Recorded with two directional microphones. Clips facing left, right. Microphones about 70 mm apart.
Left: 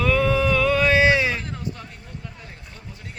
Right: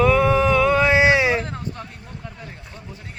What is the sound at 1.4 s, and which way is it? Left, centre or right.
Vehicle, right.